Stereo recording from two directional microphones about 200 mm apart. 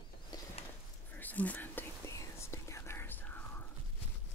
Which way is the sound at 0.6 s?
30° left (ahead or behind).